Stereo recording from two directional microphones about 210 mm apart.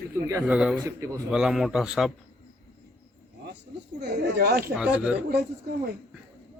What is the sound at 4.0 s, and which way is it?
Speech, 50° right (ahead or behind).